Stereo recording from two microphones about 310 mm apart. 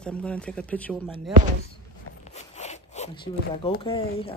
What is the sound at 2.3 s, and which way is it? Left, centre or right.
Zipper, left.